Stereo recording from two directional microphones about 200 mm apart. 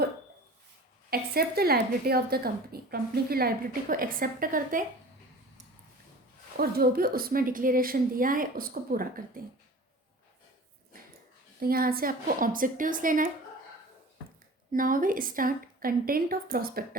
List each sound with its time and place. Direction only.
1.1 s a woman's voice: 50° right (ahead or behind)
6.6 s a woman's voice: 50° right (ahead or behind)
11.6 s a woman's voice: 50° right (ahead or behind)
14.7 s a woman's voice: 45° right (ahead or behind)